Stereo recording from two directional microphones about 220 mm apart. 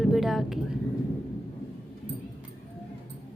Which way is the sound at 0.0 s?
Centre (ahead or behind).